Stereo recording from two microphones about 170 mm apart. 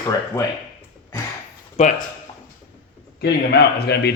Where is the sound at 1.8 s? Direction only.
40° left (ahead or behind).